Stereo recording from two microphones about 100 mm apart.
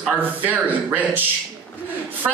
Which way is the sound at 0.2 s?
15° right (ahead or behind).